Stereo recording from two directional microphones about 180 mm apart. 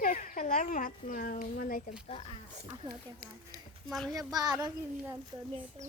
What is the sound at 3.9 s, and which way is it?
Speech, 5° left (ahead or behind).